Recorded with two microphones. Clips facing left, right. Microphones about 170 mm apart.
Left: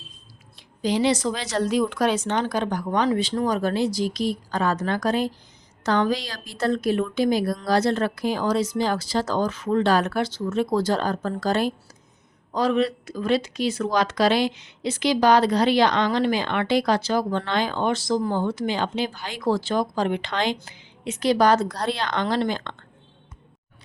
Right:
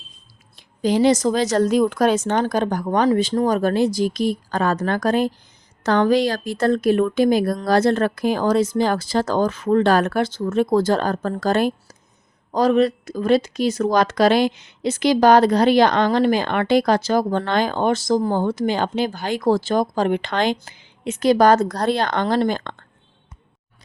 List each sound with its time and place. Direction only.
0.5 s speech: 50° right (ahead or behind)
12.5 s speech: 40° right (ahead or behind)